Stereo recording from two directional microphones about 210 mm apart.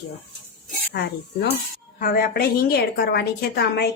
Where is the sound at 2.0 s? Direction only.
45° left (ahead or behind).